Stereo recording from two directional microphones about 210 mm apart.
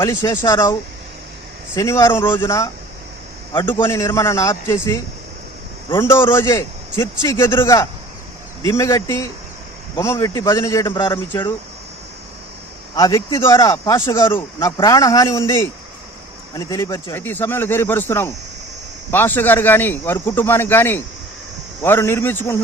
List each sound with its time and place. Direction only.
0.0 s speech: 15° left (ahead or behind)
3.7 s speech: 10° left (ahead or behind)
13.0 s speech: 15° left (ahead or behind)